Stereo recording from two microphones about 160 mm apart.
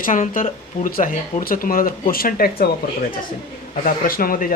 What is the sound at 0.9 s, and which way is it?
Speech, 60° left (ahead or behind).